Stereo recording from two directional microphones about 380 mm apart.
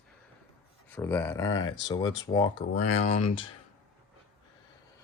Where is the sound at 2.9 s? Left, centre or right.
Centre.